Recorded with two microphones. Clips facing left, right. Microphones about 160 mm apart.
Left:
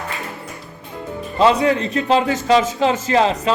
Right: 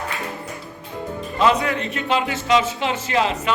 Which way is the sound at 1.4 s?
30° left (ahead or behind).